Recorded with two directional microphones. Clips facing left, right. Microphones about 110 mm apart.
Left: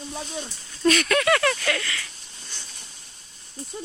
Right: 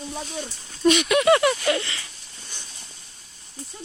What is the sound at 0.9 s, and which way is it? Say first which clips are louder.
Speech: right 3 dB; 15° right (ahead or behind).